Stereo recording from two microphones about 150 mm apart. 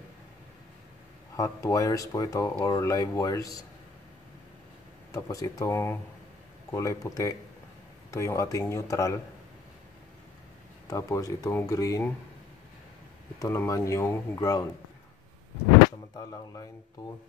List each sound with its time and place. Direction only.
1.3 s speech: 25° left (ahead or behind)
5.1 s speech: 20° left (ahead or behind)
10.9 s speech: 20° left (ahead or behind)
13.4 s speech: 20° left (ahead or behind)
16.2 s speech: 20° left (ahead or behind)